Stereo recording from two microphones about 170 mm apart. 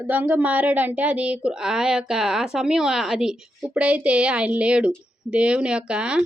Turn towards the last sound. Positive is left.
turn(degrees=-5)  # may be behind; listen again after turning